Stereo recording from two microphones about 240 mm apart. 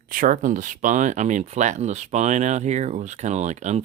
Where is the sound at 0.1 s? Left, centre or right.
Right.